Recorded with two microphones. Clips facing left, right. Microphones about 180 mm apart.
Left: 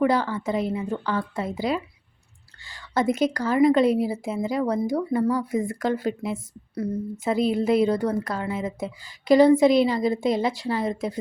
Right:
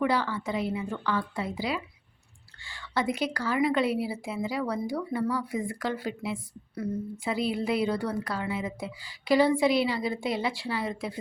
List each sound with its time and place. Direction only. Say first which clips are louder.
0.0 s a woman's voice: left 5 dB; 45° left (ahead or behind)